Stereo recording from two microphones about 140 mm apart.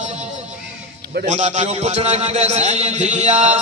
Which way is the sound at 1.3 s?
55° right (ahead or behind).